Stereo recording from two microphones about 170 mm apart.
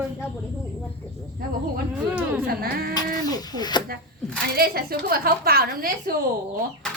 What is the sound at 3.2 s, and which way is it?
Speech, 25° left (ahead or behind).